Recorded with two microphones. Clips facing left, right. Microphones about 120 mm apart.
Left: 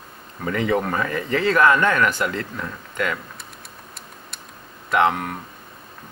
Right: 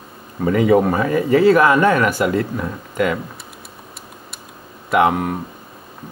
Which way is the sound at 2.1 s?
15° right (ahead or behind).